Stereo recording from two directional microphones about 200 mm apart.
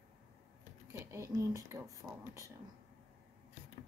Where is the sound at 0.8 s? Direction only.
15° right (ahead or behind).